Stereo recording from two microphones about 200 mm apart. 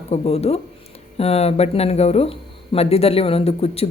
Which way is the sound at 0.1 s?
30° left (ahead or behind).